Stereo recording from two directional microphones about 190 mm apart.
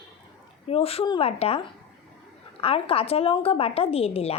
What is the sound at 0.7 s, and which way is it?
A woman's voice, 30° left (ahead or behind).